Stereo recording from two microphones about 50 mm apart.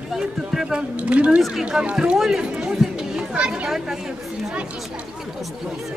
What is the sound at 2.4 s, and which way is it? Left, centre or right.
Chatter, centre.